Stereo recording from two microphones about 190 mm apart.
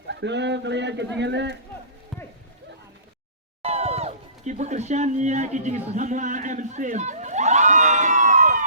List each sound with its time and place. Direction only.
0.1 s speech: 65° right (ahead or behind)
3.6 s speech: 35° right (ahead or behind)